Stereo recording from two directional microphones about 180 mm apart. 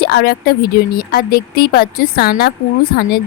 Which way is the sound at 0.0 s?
60° left (ahead or behind).